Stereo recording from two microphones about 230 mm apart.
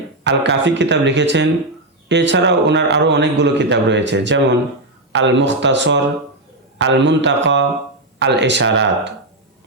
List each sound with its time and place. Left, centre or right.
0.3 s a man's voice: right